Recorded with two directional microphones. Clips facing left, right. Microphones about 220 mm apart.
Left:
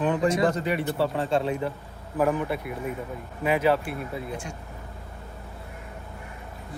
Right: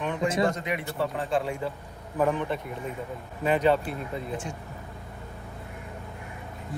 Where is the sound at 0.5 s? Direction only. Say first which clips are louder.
Left 5 dB; 35° left (ahead or behind).